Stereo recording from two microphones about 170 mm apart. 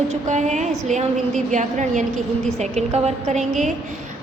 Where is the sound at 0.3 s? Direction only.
45° right (ahead or behind).